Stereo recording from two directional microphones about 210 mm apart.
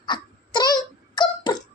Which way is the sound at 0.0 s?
20° left (ahead or behind).